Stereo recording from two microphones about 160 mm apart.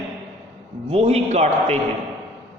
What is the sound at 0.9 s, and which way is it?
Speech, 40° right (ahead or behind).